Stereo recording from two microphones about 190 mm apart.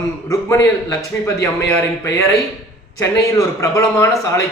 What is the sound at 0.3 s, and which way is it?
Speech, 15° left (ahead or behind).